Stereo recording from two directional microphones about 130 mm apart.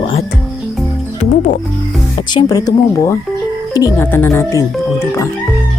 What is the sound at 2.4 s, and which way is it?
Speech, 30° left (ahead or behind).